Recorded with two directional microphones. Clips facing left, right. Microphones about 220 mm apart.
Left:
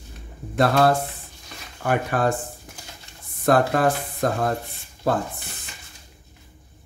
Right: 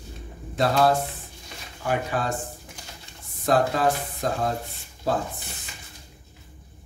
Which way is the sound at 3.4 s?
55° left (ahead or behind).